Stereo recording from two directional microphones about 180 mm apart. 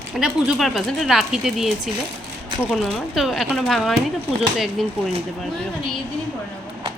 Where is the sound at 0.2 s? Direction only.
Centre (ahead or behind).